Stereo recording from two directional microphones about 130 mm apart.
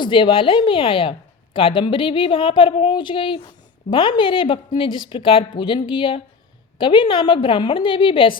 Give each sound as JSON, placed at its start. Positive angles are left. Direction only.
{"t": 0.0, "sound": "a woman's voice", "side_deg": 40}